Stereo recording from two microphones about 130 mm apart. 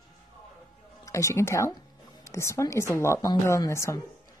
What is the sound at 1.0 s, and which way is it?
A woman's voice, 25° left (ahead or behind).